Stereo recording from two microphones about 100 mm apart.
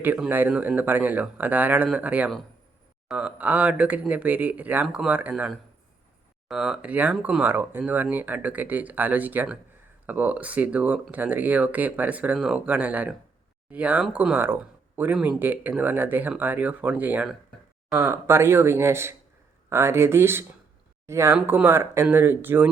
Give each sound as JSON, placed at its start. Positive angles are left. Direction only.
{"t": 0.3, "sound": "speech", "side_deg": -20}
{"t": 6.5, "sound": "speech", "side_deg": -10}
{"t": 17.9, "sound": "speech", "side_deg": -25}